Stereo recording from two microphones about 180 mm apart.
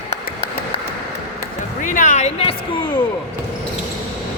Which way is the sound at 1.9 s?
45° left (ahead or behind).